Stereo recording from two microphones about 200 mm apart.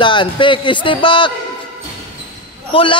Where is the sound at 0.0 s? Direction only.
25° left (ahead or behind).